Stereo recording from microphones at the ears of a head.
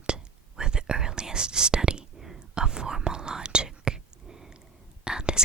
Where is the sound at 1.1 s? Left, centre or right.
Right.